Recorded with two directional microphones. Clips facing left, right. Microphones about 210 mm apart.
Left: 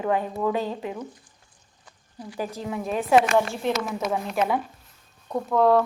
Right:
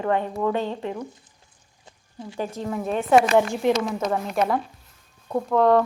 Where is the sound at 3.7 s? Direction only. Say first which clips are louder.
Right 2 dB; 5° left (ahead or behind).